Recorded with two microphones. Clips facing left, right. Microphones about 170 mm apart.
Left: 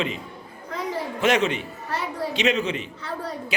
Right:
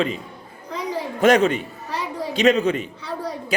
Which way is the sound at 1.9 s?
15° right (ahead or behind).